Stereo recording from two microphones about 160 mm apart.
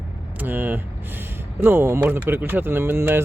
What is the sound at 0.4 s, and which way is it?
Speech, 10° right (ahead or behind).